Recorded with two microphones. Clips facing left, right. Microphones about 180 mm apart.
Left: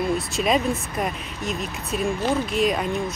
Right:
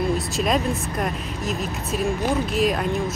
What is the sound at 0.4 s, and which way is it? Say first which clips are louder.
Speech: left 2 dB; centre (ahead or behind).